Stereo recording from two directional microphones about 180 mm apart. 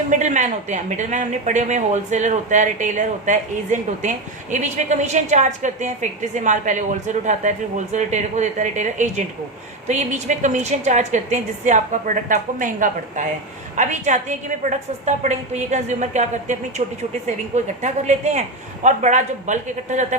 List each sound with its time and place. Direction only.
0.1 s a woman's voice: 45° right (ahead or behind)